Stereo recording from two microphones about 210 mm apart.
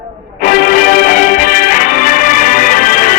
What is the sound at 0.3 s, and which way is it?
Music, 45° left (ahead or behind).